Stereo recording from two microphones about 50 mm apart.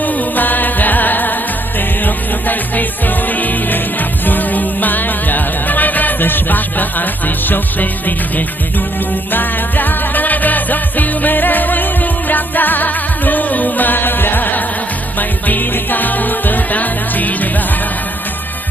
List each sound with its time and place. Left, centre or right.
0.0 s music: left
9.3 s music: left